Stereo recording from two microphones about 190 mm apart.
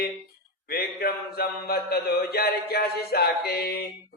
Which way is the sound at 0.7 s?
55° left (ahead or behind).